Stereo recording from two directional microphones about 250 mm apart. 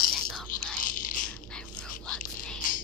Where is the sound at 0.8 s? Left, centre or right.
Left.